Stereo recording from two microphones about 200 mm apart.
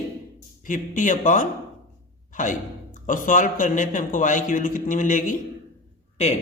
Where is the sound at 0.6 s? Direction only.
40° left (ahead or behind).